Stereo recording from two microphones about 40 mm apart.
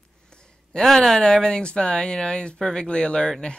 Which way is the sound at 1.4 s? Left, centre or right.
Left.